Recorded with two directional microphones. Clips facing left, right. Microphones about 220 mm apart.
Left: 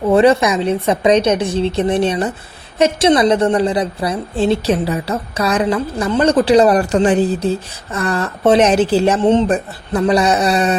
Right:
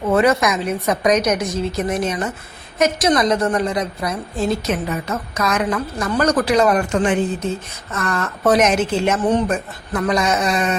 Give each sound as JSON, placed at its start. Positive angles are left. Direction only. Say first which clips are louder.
{"t": 0.1, "sound": "a woman's voice", "louder": "left 4 dB", "side_deg": 30}